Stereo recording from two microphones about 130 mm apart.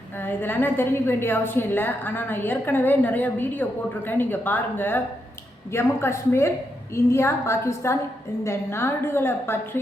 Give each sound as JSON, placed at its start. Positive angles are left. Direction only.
{"t": 0.2, "sound": "a woman's voice", "side_deg": 15}